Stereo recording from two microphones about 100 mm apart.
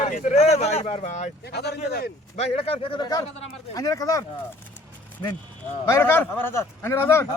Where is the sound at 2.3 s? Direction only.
80° left; by 3.0 s 65° left (ahead or behind).